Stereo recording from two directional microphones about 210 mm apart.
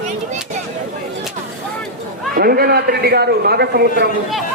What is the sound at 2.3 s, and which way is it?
A man's voice, 45° right (ahead or behind).